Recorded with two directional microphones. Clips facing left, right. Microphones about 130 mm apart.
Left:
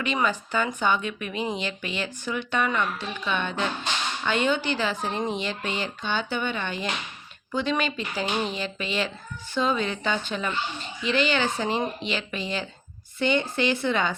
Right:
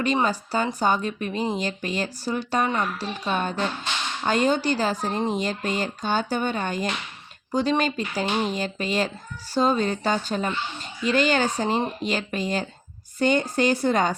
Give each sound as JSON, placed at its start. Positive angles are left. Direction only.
{"t": 0.0, "sound": "speech", "side_deg": -40}